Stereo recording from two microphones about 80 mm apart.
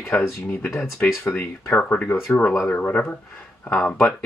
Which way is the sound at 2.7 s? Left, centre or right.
Left.